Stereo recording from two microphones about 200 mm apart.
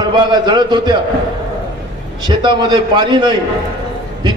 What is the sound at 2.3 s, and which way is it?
A man's voice, 20° right (ahead or behind).